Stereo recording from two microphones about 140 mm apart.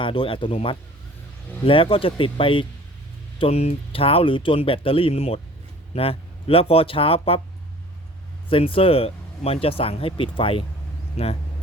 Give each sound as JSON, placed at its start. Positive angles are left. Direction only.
{"t": 0.0, "sound": "speech", "side_deg": 40}
{"t": 8.4, "sound": "speech", "side_deg": 40}